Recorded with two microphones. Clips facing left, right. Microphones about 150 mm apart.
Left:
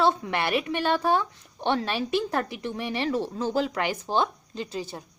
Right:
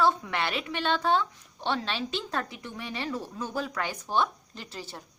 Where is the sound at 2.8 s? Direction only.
70° left (ahead or behind).